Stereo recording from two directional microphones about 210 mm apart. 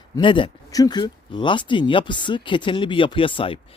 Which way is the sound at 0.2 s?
25° left (ahead or behind).